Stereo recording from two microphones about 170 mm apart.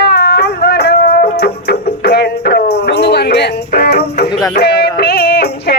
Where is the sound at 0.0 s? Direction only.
75° left (ahead or behind).